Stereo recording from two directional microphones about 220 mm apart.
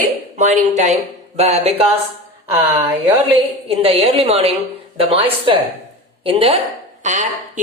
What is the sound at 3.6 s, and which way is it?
A woman's voice, 25° right (ahead or behind).